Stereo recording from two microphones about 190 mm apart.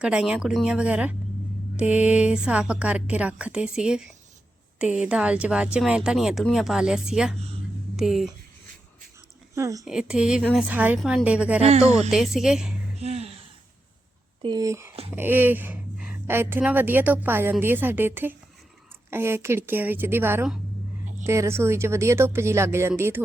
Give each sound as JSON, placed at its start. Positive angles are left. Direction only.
{"t": 0.0, "sound": "speech", "side_deg": -5}
{"t": 9.6, "sound": "speech", "side_deg": -15}
{"t": 9.8, "sound": "speech", "side_deg": -5}
{"t": 13.0, "sound": "a sound", "side_deg": -35}
{"t": 14.4, "sound": "speech", "side_deg": -20}